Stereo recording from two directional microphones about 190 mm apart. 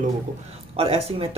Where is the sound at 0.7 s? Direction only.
30° right (ahead or behind).